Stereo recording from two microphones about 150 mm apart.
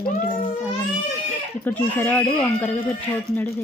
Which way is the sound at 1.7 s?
10° left (ahead or behind).